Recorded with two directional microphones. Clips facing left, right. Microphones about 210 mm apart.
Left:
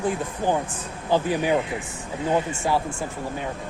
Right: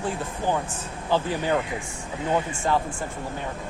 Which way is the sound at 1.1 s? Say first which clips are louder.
Left 3 dB; 15° left (ahead or behind).